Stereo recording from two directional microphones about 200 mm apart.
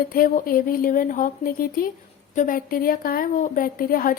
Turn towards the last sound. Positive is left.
turn(degrees=45)  # may be behind; listen again after turning